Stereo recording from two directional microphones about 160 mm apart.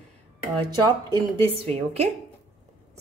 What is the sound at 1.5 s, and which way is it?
Speech, 40° right (ahead or behind).